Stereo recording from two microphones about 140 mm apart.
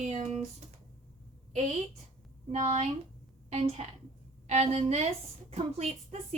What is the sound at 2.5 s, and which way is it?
A woman's voice, 55° right (ahead or behind).